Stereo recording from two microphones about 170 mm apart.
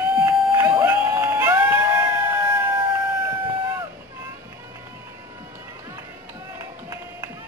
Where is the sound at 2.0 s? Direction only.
10° right (ahead or behind).